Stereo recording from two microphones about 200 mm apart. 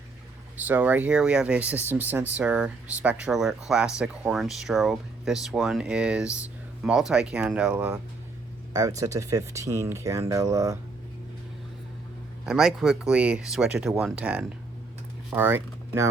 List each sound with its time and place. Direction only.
0.5 s speech: 10° right (ahead or behind)
8.7 s speech: 15° right (ahead or behind)
12.5 s speech: centre (ahead or behind)